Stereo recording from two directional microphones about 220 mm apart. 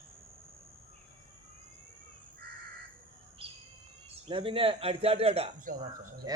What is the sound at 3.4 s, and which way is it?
Bird, 25° right (ahead or behind).